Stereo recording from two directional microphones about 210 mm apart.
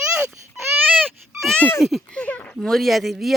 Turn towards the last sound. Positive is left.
turn(degrees=0)  # may be behind; listen again after turning